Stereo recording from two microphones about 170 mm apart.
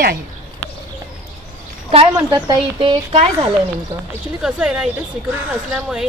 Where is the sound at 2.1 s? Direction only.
20° right (ahead or behind).